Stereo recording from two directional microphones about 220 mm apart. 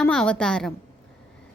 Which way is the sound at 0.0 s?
5° left (ahead or behind).